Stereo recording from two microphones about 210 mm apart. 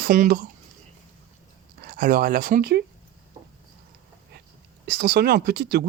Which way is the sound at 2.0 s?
45° right (ahead or behind).